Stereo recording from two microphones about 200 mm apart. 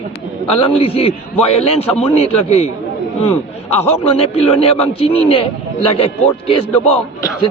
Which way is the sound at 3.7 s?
30° left (ahead or behind).